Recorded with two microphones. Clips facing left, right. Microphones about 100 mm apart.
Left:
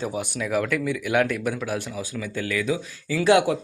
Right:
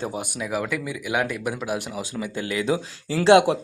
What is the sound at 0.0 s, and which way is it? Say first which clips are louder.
Speech: left 1 dB; 20° right (ahead or behind).